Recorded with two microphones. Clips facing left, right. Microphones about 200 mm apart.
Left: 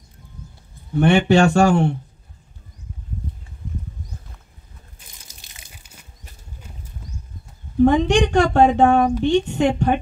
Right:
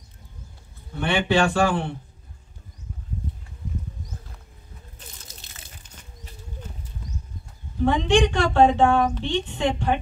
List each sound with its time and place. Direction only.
0.9 s a woman's voice: 45° left (ahead or behind)
4.9 s a sound: 10° left (ahead or behind)
7.8 s a woman's voice: 45° left (ahead or behind)